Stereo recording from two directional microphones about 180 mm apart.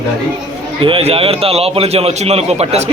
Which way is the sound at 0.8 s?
30° right (ahead or behind).